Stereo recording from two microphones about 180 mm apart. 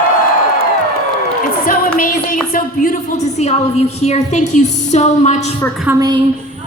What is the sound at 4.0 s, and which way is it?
A woman's voice, 35° left (ahead or behind).